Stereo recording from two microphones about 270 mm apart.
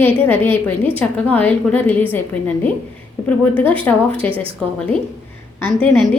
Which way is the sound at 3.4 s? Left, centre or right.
Centre.